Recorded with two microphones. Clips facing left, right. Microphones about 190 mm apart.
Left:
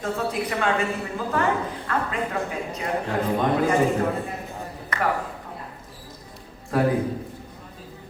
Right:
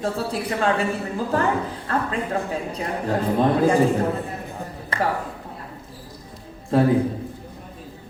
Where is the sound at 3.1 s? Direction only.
30° right (ahead or behind).